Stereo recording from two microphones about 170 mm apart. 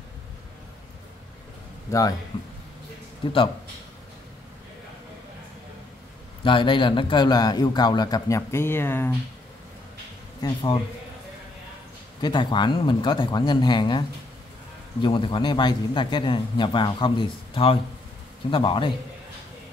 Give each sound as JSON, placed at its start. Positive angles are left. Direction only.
{"t": 1.9, "sound": "a man's voice", "side_deg": 20}
{"t": 3.2, "sound": "a man's voice", "side_deg": 30}
{"t": 6.4, "sound": "a man's voice", "side_deg": 30}
{"t": 10.4, "sound": "a man's voice", "side_deg": 30}
{"t": 12.2, "sound": "a man's voice", "side_deg": 25}